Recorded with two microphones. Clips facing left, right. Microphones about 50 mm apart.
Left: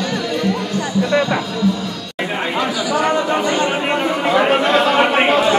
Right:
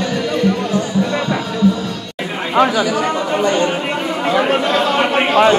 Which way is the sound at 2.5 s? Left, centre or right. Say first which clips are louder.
Right 11 dB; right.